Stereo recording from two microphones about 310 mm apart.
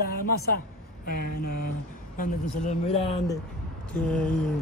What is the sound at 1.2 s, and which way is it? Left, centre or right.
Speech, left.